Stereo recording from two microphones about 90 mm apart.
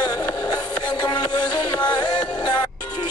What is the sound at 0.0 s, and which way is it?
Music, 50° left (ahead or behind).